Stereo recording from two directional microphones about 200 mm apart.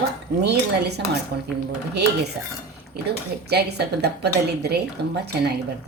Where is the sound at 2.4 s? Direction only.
55° right (ahead or behind).